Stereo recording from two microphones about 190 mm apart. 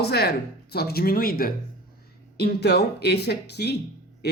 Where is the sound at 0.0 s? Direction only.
55° left (ahead or behind).